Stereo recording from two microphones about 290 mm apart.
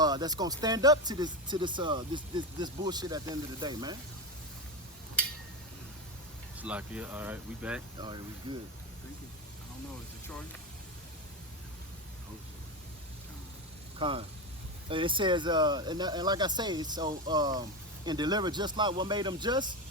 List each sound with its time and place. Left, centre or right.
0.0 s speech: centre
6.6 s speech: centre
8.0 s speech: centre
10.2 s speech: centre
14.0 s speech: centre